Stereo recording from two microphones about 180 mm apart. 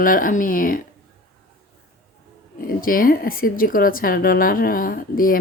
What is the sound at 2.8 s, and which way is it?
Speech, 50° left (ahead or behind).